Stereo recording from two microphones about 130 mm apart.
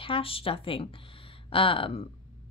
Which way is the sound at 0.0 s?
45° left (ahead or behind).